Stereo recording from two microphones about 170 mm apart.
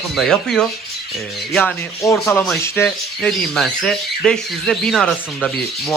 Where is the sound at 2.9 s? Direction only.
5° left (ahead or behind).